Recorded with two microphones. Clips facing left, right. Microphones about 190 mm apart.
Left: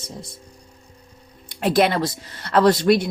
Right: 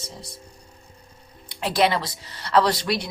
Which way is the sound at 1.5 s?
50° left (ahead or behind).